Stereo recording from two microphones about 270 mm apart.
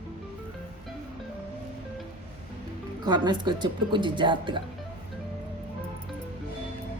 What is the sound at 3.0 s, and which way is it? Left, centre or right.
Speech, centre.